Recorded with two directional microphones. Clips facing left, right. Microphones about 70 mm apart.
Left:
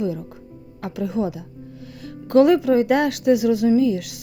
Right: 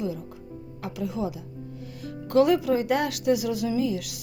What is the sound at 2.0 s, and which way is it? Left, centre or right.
A woman's voice, left.